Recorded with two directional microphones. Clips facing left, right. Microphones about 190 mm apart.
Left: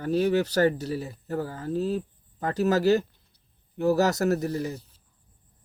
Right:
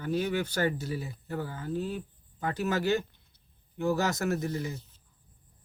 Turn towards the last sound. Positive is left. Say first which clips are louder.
# left 4 dB
turn(degrees=35)  # may be behind; listen again after turning